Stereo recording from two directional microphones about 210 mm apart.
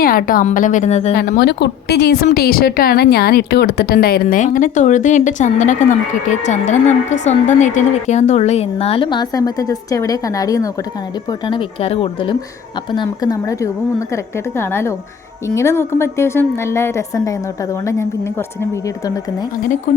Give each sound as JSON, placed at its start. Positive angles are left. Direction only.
{"t": 0.0, "sound": "speech", "side_deg": 45}
{"t": 1.1, "sound": "a woman's voice", "side_deg": 45}
{"t": 19.0, "sound": "a woman's voice", "side_deg": 15}